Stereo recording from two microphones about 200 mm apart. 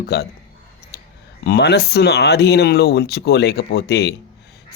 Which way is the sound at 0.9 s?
55° left (ahead or behind).